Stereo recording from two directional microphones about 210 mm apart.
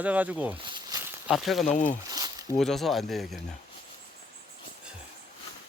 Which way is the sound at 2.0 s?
15° right (ahead or behind).